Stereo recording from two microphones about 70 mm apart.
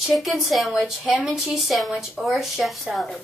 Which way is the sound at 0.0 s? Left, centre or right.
Centre.